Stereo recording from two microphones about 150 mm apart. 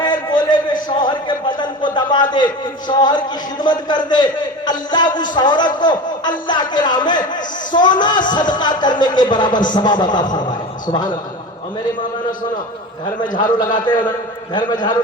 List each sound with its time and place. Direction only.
0.0 s a sound: 30° left (ahead or behind)
2.3 s a man's voice: 30° left (ahead or behind)
13.3 s a man's voice: 30° left (ahead or behind)